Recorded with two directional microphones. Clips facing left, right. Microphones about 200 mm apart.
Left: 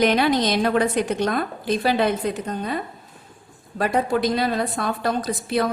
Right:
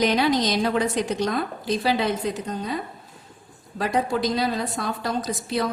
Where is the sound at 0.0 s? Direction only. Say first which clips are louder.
Left 2 dB; 55° left (ahead or behind).